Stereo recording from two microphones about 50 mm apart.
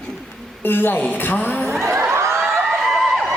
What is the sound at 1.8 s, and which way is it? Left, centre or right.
Crowd, right.